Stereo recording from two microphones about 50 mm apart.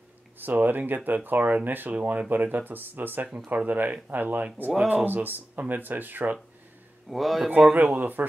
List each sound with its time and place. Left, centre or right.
0.4 s speech: right
7.1 s speech: centre
7.9 s speech: right